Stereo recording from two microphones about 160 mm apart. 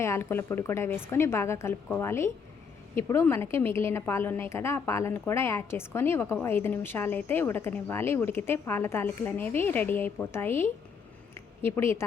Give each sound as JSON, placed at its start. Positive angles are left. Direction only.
{"t": 0.0, "sound": "a woman's voice", "side_deg": 15}